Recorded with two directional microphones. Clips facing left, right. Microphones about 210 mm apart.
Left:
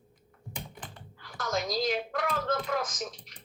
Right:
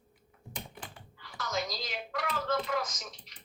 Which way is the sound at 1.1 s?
50° left (ahead or behind).